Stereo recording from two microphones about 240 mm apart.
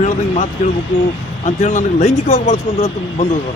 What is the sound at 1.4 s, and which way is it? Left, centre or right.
Speech, left.